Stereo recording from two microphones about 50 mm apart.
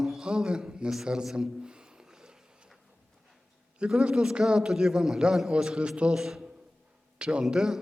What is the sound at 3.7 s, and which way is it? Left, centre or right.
A man's voice, centre.